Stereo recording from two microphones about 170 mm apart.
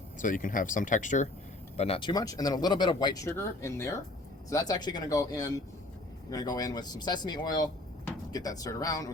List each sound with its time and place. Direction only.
0.2 s speech: 50° left (ahead or behind); by 9.1 s 20° left (ahead or behind)